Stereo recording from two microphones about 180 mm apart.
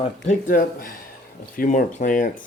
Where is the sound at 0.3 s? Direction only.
50° left (ahead or behind).